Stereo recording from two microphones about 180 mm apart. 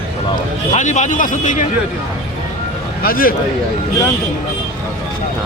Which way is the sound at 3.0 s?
55° left (ahead or behind).